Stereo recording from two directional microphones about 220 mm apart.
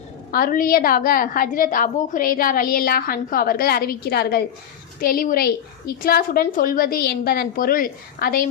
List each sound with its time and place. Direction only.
0.3 s a woman's voice: 40° left (ahead or behind)